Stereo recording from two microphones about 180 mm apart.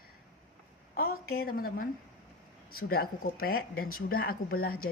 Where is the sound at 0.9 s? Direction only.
55° left (ahead or behind).